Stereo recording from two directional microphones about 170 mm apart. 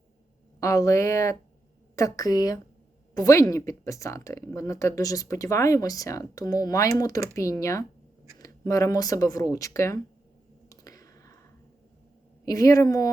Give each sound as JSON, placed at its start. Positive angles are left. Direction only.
{"t": 0.6, "sound": "speech", "side_deg": 20}
{"t": 10.7, "sound": "a sound", "side_deg": 20}
{"t": 12.5, "sound": "speech", "side_deg": 20}